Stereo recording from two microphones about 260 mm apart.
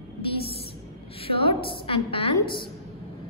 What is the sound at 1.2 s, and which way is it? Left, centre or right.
A woman's voice, left.